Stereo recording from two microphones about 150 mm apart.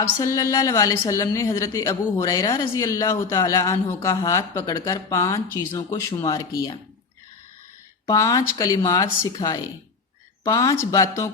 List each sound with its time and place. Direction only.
0.2 s a woman's voice: 20° left (ahead or behind)
8.0 s a woman's voice: 25° left (ahead or behind)